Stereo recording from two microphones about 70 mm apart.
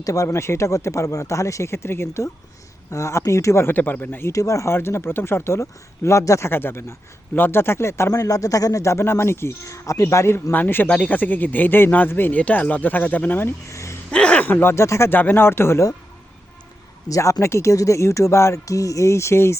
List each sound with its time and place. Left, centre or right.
0.0 s speech: left
3.8 s speech: left
4.3 s speech: left
6.5 s speech: left
8.1 s speech: left
10.5 s speech: left
10.8 s speech: centre
13.7 s gasp: left
14.1 s speech: centre; by 15.1 s left
15.1 s speech: left
17.1 s speech: left